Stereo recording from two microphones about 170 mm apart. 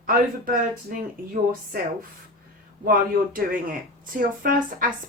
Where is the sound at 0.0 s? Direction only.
55° right (ahead or behind).